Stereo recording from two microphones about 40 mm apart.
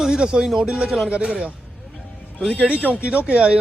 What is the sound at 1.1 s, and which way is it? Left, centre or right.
Speech, right.